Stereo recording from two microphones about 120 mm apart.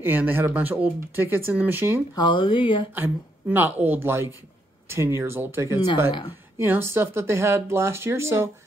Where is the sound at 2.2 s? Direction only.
45° left (ahead or behind).